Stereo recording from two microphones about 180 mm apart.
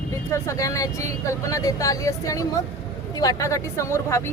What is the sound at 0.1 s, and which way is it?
Speech, 15° left (ahead or behind).